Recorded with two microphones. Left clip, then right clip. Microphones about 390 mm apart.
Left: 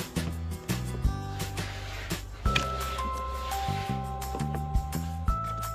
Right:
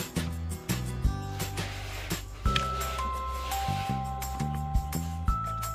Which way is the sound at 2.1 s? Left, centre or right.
Centre.